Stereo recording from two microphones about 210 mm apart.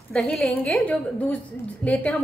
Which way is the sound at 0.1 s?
5° left (ahead or behind).